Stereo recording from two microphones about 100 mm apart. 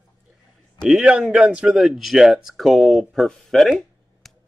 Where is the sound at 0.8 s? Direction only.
5° right (ahead or behind).